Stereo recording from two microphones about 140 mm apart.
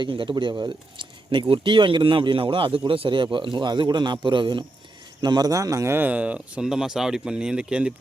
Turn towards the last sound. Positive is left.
turn(degrees=-5)  # may be behind; listen again after turning